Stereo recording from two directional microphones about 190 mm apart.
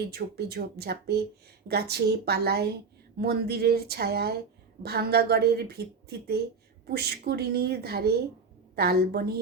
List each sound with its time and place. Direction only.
0.1 s a woman's voice: 55° right (ahead or behind)